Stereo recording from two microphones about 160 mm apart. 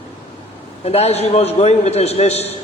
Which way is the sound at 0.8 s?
40° left (ahead or behind).